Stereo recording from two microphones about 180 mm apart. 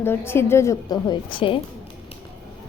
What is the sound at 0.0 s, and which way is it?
A woman's voice, 15° left (ahead or behind).